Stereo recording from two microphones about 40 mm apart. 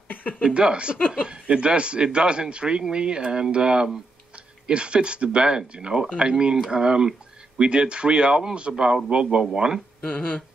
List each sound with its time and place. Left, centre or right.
0.1 s a sound: left
0.4 s speech: right
0.9 s music: left
1.2 s speech: right
10.0 s music: left